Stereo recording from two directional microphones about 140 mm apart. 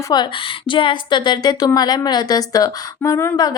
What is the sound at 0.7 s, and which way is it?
A woman's voice, 35° left (ahead or behind).